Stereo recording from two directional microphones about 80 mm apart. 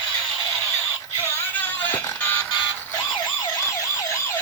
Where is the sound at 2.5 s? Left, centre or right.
Left.